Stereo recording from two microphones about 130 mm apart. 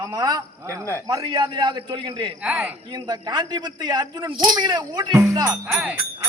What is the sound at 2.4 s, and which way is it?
Speech, 10° right (ahead or behind).